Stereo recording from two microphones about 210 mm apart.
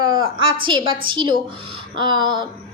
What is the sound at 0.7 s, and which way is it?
A woman's voice, 20° right (ahead or behind).